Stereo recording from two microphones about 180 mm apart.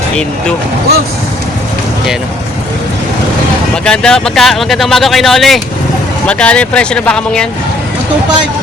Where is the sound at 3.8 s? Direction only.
5° left (ahead or behind).